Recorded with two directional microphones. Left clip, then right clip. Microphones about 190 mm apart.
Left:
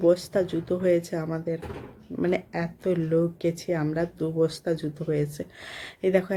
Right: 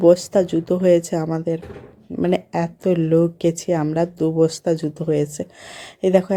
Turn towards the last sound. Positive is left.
turn(degrees=-30)  # may be behind; listen again after turning